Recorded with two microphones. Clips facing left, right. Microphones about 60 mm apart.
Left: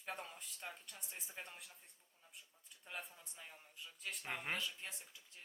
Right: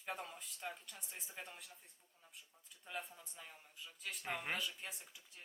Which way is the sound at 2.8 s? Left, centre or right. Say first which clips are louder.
Right 3 dB; centre.